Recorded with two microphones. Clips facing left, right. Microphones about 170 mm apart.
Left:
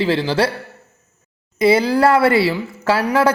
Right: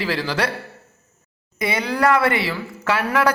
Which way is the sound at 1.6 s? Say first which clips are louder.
Left 7 dB; 30° left (ahead or behind).